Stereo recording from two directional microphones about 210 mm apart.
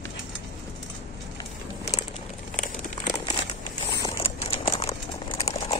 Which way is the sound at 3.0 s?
20° left (ahead or behind).